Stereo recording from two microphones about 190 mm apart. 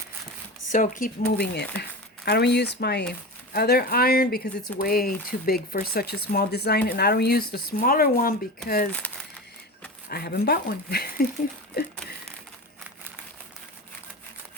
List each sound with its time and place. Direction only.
0.7 s speech: 45° left (ahead or behind)
8.9 s speech: 5° left (ahead or behind)
10.1 s speech: 55° left (ahead or behind)